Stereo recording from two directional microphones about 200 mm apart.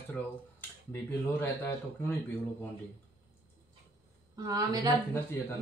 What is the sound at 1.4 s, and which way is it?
Speech, 10° left (ahead or behind).